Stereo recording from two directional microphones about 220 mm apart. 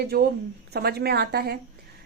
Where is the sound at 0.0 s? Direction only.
45° right (ahead or behind).